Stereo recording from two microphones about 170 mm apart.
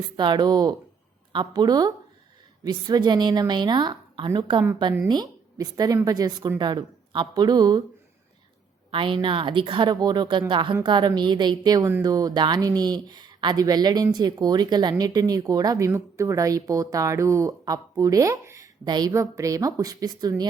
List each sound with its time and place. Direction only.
0.2 s speech: 25° right (ahead or behind)
8.9 s speech: 30° right (ahead or behind)